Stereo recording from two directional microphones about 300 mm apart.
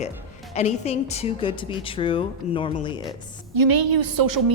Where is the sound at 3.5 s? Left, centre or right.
Right.